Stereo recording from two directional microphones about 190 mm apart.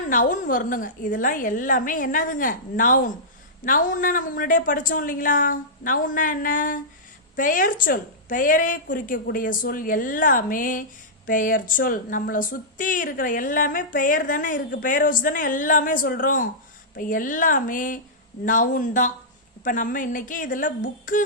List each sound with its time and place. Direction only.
0.1 s a woman's voice: 45° left (ahead or behind)